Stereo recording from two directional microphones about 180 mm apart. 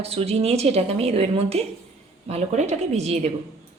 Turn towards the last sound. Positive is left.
turn(degrees=-35)  # may be behind; listen again after turning